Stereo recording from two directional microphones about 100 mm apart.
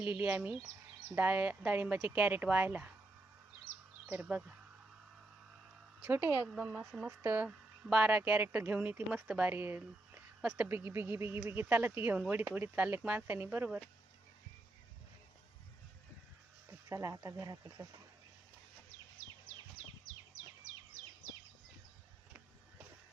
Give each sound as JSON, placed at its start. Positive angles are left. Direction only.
{"t": 0.0, "sound": "a woman's voice", "side_deg": -15}
{"t": 4.0, "sound": "a woman's voice", "side_deg": -15}
{"t": 6.1, "sound": "speech", "side_deg": -25}
{"t": 6.5, "sound": "a woman's voice", "side_deg": -10}
{"t": 7.2, "sound": "a woman's voice", "side_deg": -20}
{"t": 13.7, "sound": "speech", "side_deg": 0}
{"t": 16.6, "sound": "speech", "side_deg": -30}